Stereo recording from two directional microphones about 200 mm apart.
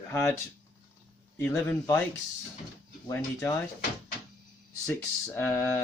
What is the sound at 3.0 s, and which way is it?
Speech, 15° left (ahead or behind).